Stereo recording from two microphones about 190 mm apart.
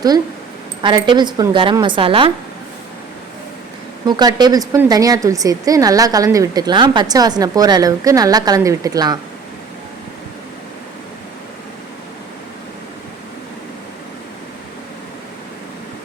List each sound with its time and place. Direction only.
0.8 s speech: 25° right (ahead or behind)
4.0 s speech: 20° right (ahead or behind)